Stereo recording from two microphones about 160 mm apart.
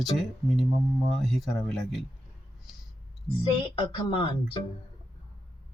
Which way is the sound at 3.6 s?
30° left (ahead or behind).